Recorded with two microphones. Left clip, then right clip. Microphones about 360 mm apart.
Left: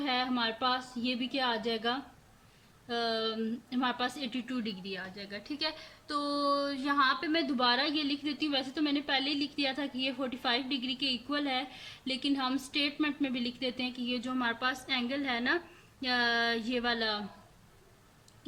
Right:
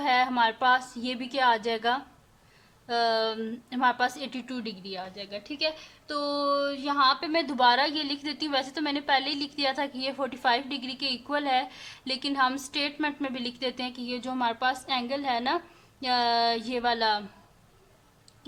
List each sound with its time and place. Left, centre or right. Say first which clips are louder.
0.0 s speech: right 8 dB; centre